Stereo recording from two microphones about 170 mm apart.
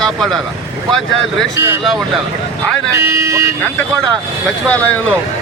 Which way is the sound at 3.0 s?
15° right (ahead or behind).